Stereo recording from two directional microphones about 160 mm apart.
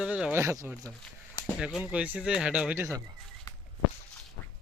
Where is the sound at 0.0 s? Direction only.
5° right (ahead or behind).